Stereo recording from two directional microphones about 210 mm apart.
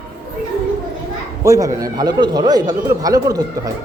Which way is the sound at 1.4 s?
15° right (ahead or behind).